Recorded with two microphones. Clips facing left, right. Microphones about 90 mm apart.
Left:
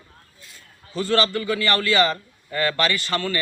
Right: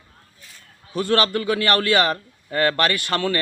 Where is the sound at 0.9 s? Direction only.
60° right (ahead or behind).